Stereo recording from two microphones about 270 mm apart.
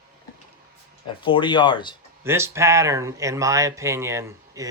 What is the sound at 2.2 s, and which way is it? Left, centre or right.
Speech, centre.